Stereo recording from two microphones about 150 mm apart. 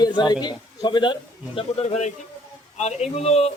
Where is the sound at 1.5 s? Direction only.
45° left (ahead or behind).